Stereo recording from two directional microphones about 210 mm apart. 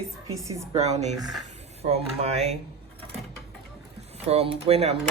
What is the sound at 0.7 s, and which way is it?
Speech, 30° right (ahead or behind).